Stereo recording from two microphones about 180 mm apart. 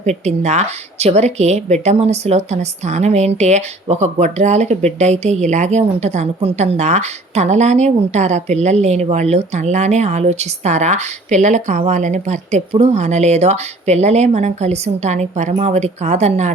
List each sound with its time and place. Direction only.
0.0 s speech: 40° right (ahead or behind)